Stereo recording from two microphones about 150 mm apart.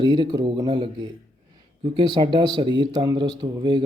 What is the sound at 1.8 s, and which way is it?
Speech, 35° right (ahead or behind).